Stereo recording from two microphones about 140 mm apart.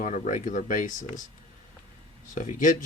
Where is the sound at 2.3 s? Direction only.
65° left (ahead or behind).